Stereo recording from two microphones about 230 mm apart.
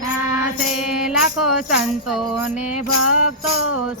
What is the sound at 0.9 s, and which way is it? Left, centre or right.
Music, centre.